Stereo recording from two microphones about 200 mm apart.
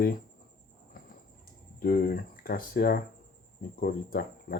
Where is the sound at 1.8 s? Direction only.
45° left (ahead or behind).